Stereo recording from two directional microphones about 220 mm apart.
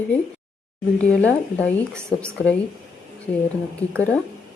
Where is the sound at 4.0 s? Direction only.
5° left (ahead or behind).